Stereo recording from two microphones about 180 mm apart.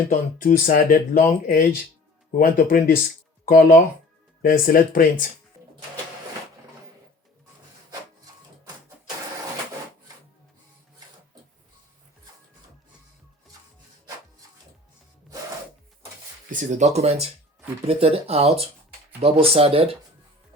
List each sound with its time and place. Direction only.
0.1 s speech: 50° left (ahead or behind)
16.5 s speech: 40° right (ahead or behind)